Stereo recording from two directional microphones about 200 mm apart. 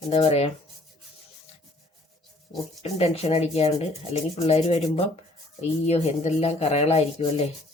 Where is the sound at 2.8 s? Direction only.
30° left (ahead or behind).